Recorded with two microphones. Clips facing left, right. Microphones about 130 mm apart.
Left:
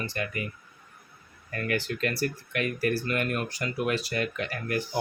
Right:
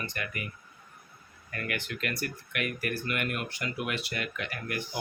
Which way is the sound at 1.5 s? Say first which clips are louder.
Left 6 dB; 35° left (ahead or behind).